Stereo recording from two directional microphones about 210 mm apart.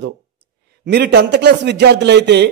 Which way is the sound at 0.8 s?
50° right (ahead or behind).